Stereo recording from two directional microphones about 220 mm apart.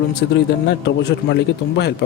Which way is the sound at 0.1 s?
50° left (ahead or behind).